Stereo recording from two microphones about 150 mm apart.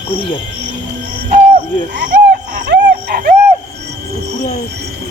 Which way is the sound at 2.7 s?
75° right (ahead or behind).